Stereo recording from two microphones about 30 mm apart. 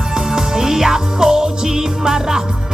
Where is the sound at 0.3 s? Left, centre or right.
Centre.